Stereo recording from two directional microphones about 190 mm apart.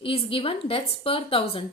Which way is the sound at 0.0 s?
30° left (ahead or behind).